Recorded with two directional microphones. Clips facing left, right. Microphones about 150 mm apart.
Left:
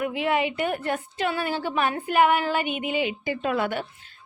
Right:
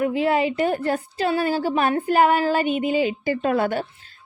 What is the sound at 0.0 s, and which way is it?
A woman's voice, 35° right (ahead or behind).